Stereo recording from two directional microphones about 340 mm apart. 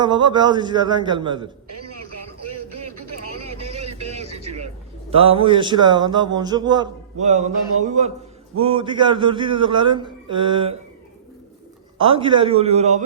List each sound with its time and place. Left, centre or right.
0.0 s speech: centre
3.5 s a sound: centre
5.1 s speech: centre
11.9 s speech: centre